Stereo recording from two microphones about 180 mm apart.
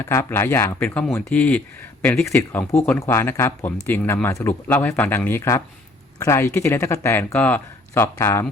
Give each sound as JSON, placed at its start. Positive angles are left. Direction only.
{"t": 0.0, "sound": "speech", "side_deg": 15}